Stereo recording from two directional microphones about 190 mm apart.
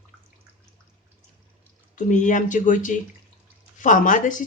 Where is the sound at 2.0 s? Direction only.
40° left (ahead or behind).